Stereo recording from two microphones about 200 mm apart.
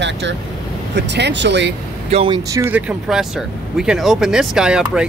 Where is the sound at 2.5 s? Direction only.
10° right (ahead or behind).